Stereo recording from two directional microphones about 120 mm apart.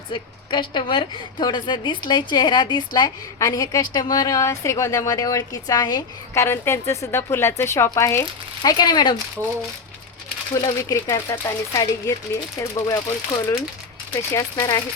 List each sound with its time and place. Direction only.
0.1 s a woman's voice: 40° left (ahead or behind)
6.3 s a woman's voice: 20° left (ahead or behind)
8.8 s a woman's voice: 35° left (ahead or behind)
10.5 s a woman's voice: 35° left (ahead or behind)
14.1 s a woman's voice: 30° left (ahead or behind)